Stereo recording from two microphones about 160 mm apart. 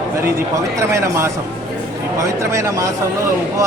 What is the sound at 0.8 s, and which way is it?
A man's voice, 20° right (ahead or behind).